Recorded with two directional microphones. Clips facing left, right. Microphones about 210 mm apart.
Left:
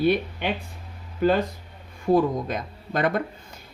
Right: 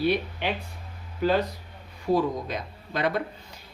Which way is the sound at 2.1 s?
50° left (ahead or behind).